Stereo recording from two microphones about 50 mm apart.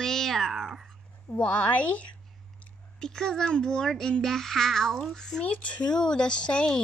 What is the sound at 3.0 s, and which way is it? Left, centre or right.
A child's voice, centre.